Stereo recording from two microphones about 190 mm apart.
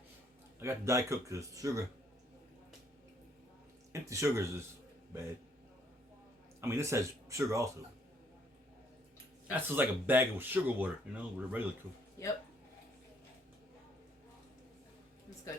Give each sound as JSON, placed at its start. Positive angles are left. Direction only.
{"t": 0.6, "sound": "speech", "side_deg": -15}
{"t": 3.9, "sound": "speech", "side_deg": -15}
{"t": 6.6, "sound": "speech", "side_deg": -15}
{"t": 9.5, "sound": "speech", "side_deg": -10}
{"t": 12.2, "sound": "speech", "side_deg": 15}